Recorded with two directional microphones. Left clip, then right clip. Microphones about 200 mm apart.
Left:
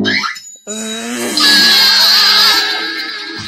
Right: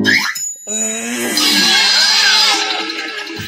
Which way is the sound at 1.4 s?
35° left (ahead or behind).